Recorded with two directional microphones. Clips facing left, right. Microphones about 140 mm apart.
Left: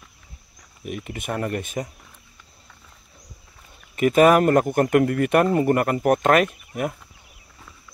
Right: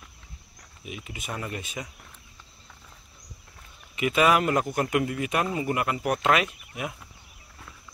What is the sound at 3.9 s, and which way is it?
Speech, 45° left (ahead or behind).